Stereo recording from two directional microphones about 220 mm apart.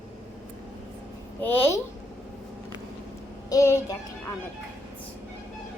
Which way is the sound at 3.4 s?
15° left (ahead or behind).